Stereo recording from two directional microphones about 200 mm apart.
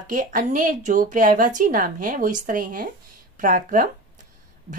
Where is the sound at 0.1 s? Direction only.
40° right (ahead or behind).